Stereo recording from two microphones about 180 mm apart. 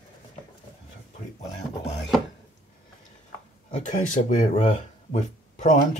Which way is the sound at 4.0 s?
45° left (ahead or behind).